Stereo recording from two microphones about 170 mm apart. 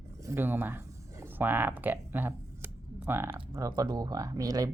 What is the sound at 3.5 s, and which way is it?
Speech, 25° right (ahead or behind).